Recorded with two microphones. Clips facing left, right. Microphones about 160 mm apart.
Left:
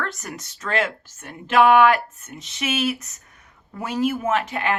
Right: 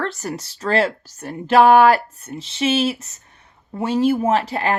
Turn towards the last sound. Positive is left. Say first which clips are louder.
# right 4 dB
turn(degrees=-35)  # may be behind; listen again after turning